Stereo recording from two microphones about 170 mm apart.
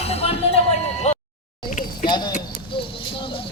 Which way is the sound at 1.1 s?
40° left (ahead or behind).